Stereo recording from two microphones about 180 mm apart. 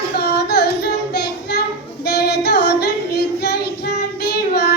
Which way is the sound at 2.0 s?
70° left (ahead or behind).